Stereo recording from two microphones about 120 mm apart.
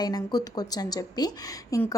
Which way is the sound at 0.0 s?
35° left (ahead or behind).